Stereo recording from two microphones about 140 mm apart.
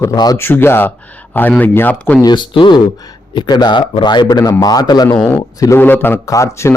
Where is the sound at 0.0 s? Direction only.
25° left (ahead or behind); by 2.1 s 10° left (ahead or behind).